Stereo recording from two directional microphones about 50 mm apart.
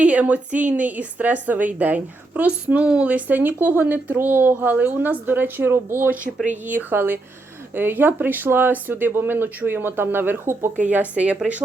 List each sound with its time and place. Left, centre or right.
0.0 s speech: right
6.4 s speech: right
6.9 s speech: right
11.1 s speech: right